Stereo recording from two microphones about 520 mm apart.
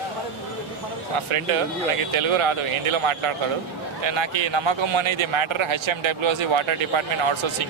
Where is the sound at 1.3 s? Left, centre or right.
Right.